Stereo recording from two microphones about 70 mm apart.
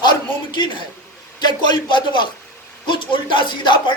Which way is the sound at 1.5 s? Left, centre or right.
Left.